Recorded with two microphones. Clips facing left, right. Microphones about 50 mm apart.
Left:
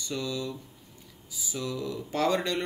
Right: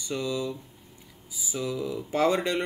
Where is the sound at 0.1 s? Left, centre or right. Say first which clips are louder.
Right 3 dB; right.